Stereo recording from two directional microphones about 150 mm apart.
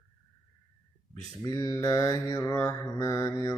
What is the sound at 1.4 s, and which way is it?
Mantra, 20° left (ahead or behind).